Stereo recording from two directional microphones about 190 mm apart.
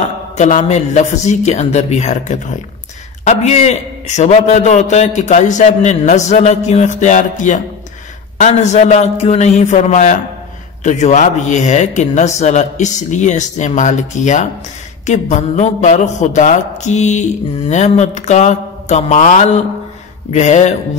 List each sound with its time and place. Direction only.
0.4 s a man's voice: 40° left (ahead or behind)